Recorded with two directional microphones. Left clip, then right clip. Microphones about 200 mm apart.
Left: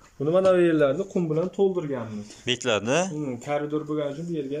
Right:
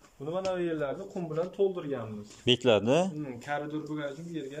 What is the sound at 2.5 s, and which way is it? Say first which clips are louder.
Speech: even; 15° right (ahead or behind).